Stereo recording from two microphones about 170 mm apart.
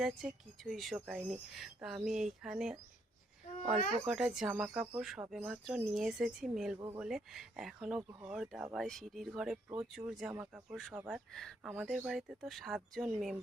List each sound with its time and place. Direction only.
0.0 s speech: centre (ahead or behind)
4.1 s speech: 5° right (ahead or behind)
6.7 s speech: 20° right (ahead or behind)
7.0 s speech: centre (ahead or behind)
11.3 s speech: centre (ahead or behind)